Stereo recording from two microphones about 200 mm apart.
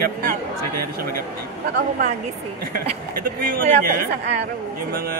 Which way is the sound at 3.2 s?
45° right (ahead or behind).